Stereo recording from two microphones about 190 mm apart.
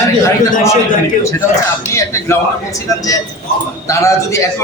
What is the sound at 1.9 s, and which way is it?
A man's voice, 15° left (ahead or behind).